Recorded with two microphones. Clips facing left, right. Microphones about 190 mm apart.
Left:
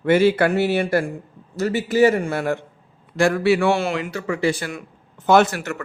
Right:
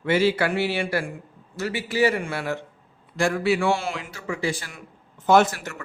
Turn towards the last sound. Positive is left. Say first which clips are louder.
# left 2 dB
turn(degrees=65)  # may be behind; listen again after turning